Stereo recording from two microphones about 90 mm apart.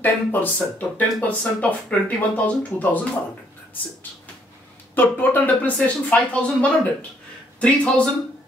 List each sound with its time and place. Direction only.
0.0 s speech: 20° left (ahead or behind)
4.9 s speech: 20° left (ahead or behind)